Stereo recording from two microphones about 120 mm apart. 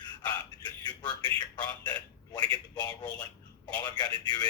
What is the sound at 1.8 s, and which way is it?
Telephone, 35° left (ahead or behind).